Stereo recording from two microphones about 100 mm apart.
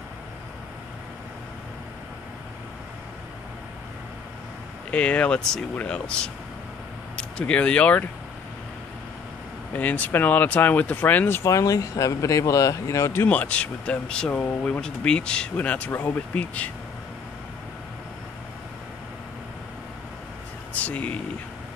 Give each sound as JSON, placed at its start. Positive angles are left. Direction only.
{"t": 4.9, "sound": "speech", "side_deg": 10}
{"t": 9.7, "sound": "speech", "side_deg": 15}
{"t": 20.7, "sound": "vehicle", "side_deg": 15}